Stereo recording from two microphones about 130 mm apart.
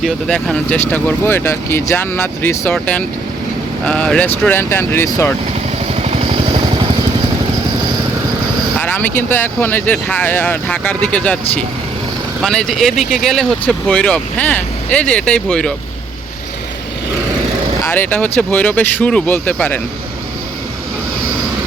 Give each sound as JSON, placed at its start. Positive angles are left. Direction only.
{"t": 0.0, "sound": "speech", "side_deg": 5}
{"t": 6.0, "sound": "vehicle", "side_deg": -55}
{"t": 8.8, "sound": "speech", "side_deg": 15}
{"t": 17.8, "sound": "speech", "side_deg": 15}